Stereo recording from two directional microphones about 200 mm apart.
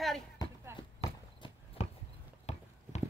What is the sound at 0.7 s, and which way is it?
Horse, 25° left (ahead or behind).